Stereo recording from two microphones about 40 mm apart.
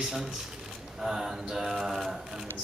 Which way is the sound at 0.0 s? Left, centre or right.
Centre.